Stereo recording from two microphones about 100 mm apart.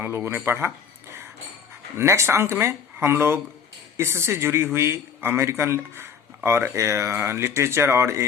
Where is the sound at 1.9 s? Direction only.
25° right (ahead or behind).